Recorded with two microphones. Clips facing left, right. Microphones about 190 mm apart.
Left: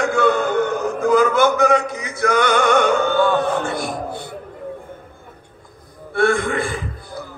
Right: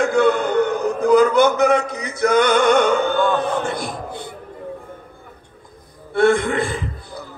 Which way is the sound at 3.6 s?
20° right (ahead or behind).